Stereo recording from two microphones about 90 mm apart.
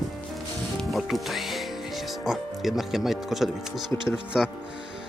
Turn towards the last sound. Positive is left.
turn(degrees=-5)  # may be behind; listen again after turning